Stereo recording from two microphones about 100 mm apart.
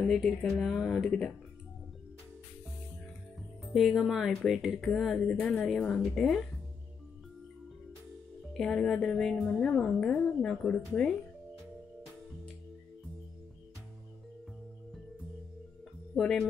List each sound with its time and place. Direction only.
0.0 s speech: 5° left (ahead or behind)
3.6 s speech: centre (ahead or behind)
5.2 s a woman's voice: 15° left (ahead or behind)
8.5 s a woman's voice: 5° left (ahead or behind)
16.2 s a woman's voice: 5° left (ahead or behind)